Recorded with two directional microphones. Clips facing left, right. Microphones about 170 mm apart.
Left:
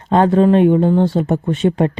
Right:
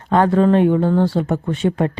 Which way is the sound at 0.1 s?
20° left (ahead or behind).